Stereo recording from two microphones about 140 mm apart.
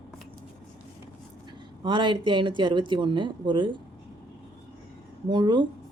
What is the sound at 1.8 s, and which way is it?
Speech, 35° right (ahead or behind).